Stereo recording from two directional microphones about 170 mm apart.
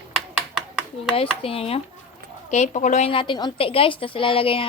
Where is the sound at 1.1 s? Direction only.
35° left (ahead or behind).